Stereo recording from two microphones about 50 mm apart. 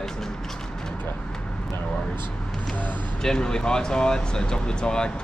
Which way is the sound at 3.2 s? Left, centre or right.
Centre.